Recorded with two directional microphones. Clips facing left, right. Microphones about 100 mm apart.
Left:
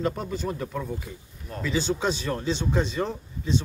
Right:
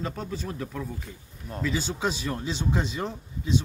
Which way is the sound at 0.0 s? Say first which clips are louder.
Left 5 dB; centre (ahead or behind).